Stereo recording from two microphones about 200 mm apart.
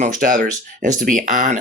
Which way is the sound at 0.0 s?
40° right (ahead or behind).